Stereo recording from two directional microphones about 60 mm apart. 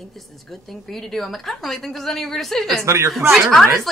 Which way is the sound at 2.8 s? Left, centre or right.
Right.